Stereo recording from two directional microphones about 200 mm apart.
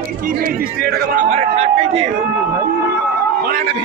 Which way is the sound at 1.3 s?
35° right (ahead or behind).